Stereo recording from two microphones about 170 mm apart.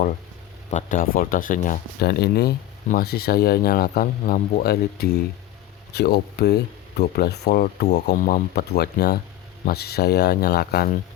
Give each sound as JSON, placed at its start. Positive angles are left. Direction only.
{"t": 0.7, "sound": "speech", "side_deg": 45}
{"t": 2.0, "sound": "speech", "side_deg": 70}
{"t": 8.1, "sound": "speech", "side_deg": 55}